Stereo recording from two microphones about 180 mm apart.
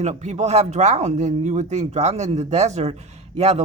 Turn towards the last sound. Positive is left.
turn(degrees=-35)  # may be behind; listen again after turning